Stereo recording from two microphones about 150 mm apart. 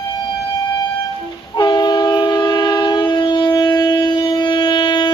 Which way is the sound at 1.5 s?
30° left (ahead or behind).